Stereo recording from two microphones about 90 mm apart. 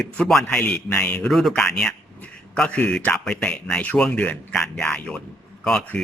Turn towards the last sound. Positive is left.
turn(degrees=10)  # may be behind; listen again after turning